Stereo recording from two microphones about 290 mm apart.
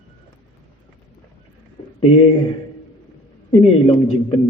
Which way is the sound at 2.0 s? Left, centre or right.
Left.